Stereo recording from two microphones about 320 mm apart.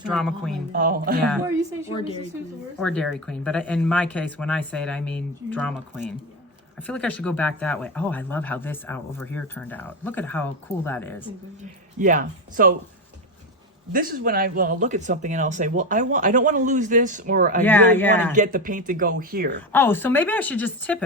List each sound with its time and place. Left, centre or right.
0.1 s speech: centre
0.7 s speech: right
2.7 s speech: centre
11.9 s speech: right
13.9 s speech: right
17.6 s speech: centre
18.3 s speech: right
19.7 s speech: centre